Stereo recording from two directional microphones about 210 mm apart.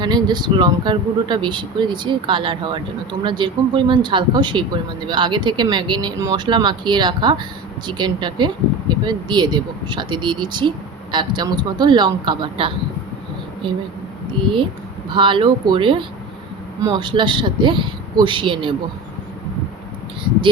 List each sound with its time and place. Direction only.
0.0 s speech: 20° right (ahead or behind)
15.1 s speech: 25° right (ahead or behind)